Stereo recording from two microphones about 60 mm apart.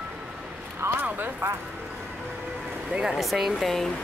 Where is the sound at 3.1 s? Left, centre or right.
Centre.